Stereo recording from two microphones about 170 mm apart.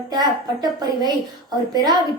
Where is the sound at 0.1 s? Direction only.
25° right (ahead or behind).